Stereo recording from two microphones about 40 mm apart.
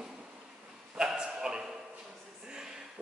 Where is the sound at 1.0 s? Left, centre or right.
Right.